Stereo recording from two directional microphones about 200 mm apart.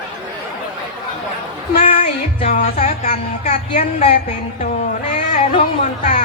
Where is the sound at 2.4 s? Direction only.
35° left (ahead or behind).